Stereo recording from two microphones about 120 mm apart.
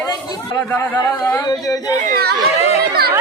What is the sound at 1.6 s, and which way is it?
Baby cry, 30° left (ahead or behind).